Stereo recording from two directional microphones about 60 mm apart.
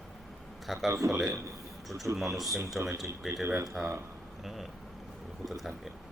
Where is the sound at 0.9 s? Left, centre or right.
Right.